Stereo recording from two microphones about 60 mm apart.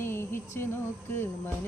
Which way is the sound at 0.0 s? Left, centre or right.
Left.